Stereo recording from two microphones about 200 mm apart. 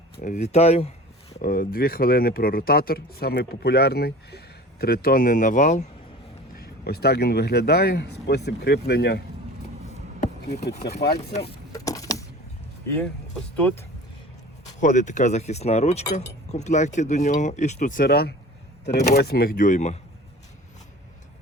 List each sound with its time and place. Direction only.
0.2 s speech: 35° left (ahead or behind)
1.3 s speech: 45° left (ahead or behind)
6.6 s speech: 50° left (ahead or behind)
9.9 s a sound: 35° left (ahead or behind)
11.2 s speech: 30° left (ahead or behind)
11.7 s vehicle: 15° left (ahead or behind)
13.0 s speech: 5° left (ahead or behind)
14.8 s speech: 40° left (ahead or behind)